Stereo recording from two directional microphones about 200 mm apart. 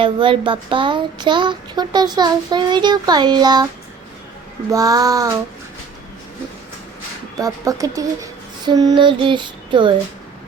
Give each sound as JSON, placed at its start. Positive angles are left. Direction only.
{"t": 0.0, "sound": "child singing", "side_deg": -25}
{"t": 4.7, "sound": "child singing", "side_deg": -15}
{"t": 7.3, "sound": "speech", "side_deg": -15}